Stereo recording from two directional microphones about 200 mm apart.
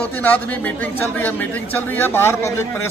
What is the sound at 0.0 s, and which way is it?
A man's voice, 10° left (ahead or behind).